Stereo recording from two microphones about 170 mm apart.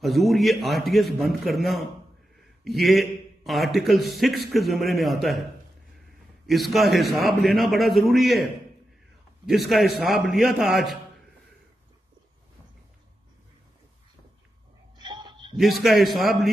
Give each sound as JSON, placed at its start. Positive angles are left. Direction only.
{"t": 0.0, "sound": "a man's voice", "side_deg": 0}
{"t": 9.5, "sound": "a man's voice", "side_deg": 0}
{"t": 15.0, "sound": "a sound", "side_deg": -25}
{"t": 15.5, "sound": "a man's voice", "side_deg": 0}